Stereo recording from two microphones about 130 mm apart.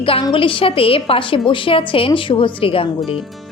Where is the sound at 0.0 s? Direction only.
45° left (ahead or behind).